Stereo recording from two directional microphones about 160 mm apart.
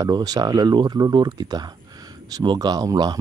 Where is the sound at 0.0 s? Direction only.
25° right (ahead or behind).